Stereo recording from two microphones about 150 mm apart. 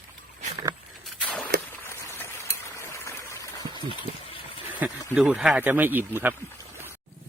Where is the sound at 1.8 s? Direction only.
15° left (ahead or behind).